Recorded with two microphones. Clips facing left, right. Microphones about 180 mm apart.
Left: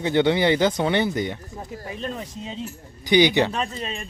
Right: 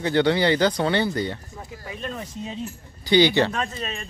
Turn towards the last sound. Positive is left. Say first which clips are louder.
# left 1 dB
turn(degrees=15)  # may be behind; listen again after turning